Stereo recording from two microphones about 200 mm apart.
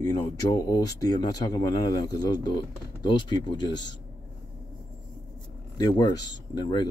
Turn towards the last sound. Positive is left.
turn(degrees=20)  # may be behind; listen again after turning